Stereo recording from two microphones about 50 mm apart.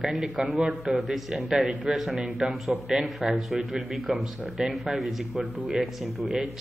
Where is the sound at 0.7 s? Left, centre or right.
Centre.